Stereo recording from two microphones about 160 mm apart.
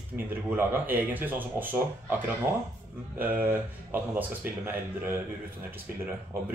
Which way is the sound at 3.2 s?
10° right (ahead or behind).